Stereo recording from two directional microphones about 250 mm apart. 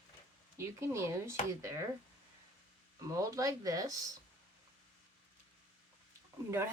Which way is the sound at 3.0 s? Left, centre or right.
Centre.